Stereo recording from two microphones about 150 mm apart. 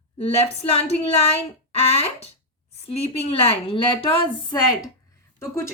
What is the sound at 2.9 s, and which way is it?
Speech, 40° left (ahead or behind).